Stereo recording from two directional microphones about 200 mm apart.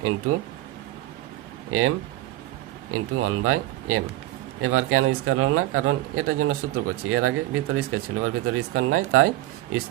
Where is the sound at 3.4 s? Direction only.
90° right.